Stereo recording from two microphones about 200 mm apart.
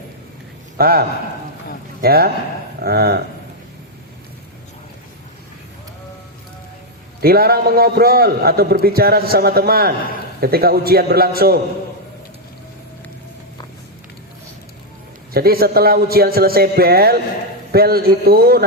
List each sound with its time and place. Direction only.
0.8 s a man's voice: 50° right (ahead or behind)
7.2 s a man's voice: 50° right (ahead or behind)
15.3 s a man's voice: 50° right (ahead or behind)